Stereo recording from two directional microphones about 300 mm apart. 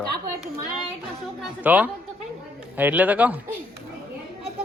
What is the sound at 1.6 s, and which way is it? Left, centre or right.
A man's voice, centre.